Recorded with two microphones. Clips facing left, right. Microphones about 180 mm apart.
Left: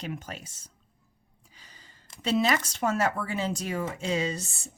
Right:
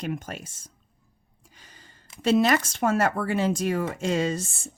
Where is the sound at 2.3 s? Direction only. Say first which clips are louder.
Right 3 dB; 50° right (ahead or behind).